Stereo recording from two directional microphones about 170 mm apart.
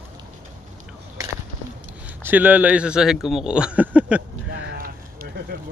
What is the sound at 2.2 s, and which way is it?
A man's voice, 10° right (ahead or behind).